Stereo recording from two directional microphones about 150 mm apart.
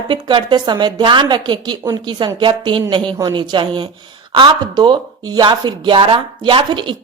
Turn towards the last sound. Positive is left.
turn(degrees=-35)  # may be behind; listen again after turning